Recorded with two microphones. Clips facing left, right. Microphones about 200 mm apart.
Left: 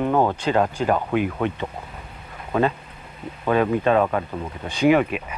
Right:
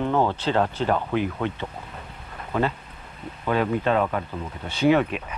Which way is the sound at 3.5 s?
20° left (ahead or behind).